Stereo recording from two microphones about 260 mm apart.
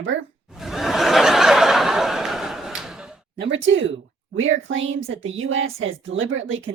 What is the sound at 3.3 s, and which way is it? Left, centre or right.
Speech, right.